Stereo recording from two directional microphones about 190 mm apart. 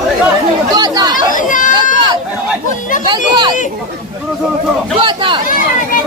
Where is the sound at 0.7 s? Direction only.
20° right (ahead or behind).